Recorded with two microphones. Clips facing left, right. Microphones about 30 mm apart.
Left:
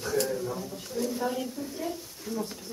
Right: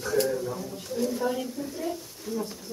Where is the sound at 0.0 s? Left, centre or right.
Centre.